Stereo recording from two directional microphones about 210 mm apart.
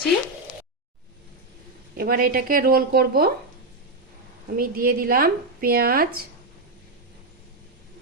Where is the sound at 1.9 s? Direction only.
45° right (ahead or behind).